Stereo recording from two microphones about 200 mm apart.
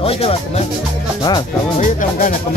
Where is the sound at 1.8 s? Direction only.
40° left (ahead or behind).